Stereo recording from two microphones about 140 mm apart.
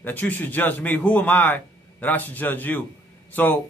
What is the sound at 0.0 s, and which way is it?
A man's voice, 10° left (ahead or behind).